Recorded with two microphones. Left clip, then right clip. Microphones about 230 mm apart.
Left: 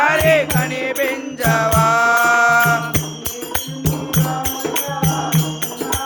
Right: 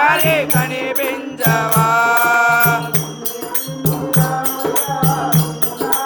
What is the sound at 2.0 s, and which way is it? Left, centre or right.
Music, left.